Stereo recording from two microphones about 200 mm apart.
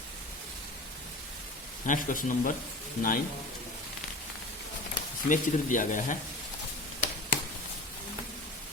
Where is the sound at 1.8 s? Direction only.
40° left (ahead or behind).